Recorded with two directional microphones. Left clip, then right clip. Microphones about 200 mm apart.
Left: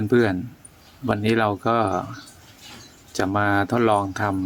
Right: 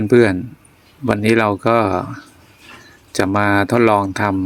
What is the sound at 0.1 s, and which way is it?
Speech, 35° right (ahead or behind).